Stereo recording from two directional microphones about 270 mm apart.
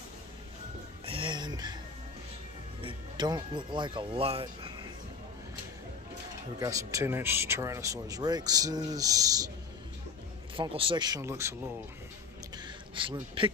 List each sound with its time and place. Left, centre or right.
1.0 s music: centre
2.8 s speech: centre
6.6 s speech: centre
10.5 s speech: centre
12.6 s a sound: centre